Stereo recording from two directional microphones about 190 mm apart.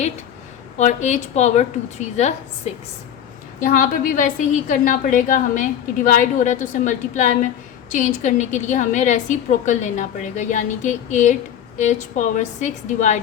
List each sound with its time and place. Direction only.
0.8 s a woman's voice: 40° left (ahead or behind)
3.6 s a woman's voice: 45° left (ahead or behind)